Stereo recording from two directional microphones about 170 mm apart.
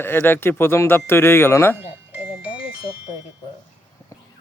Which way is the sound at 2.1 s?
5° right (ahead or behind).